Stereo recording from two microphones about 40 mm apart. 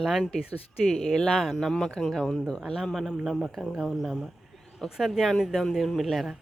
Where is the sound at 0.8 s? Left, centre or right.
Centre.